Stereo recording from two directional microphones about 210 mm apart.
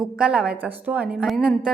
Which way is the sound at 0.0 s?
5° right (ahead or behind).